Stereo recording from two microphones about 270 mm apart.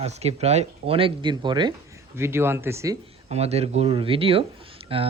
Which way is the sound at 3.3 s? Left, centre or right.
Right.